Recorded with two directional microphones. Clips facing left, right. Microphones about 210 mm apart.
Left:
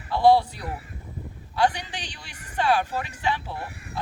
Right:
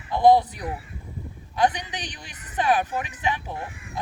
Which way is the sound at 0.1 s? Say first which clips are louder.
Right 1 dB; 20° right (ahead or behind).